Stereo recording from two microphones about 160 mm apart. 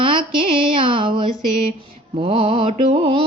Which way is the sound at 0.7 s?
35° right (ahead or behind).